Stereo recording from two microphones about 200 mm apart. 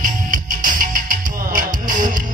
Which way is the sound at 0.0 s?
40° right (ahead or behind).